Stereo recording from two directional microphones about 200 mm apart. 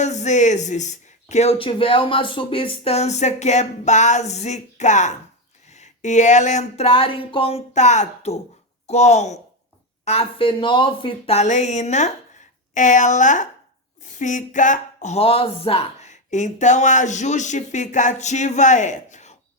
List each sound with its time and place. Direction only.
0.0 s speech: 35° left (ahead or behind)